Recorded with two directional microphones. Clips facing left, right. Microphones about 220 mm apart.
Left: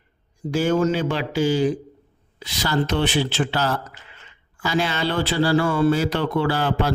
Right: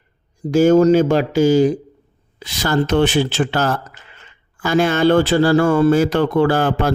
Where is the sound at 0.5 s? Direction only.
45° right (ahead or behind).